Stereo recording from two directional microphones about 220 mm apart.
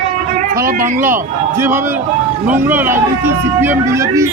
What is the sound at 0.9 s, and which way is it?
A man's voice, 10° right (ahead or behind).